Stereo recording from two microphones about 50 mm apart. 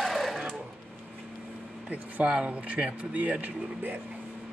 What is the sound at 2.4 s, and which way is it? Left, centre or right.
Speech, right.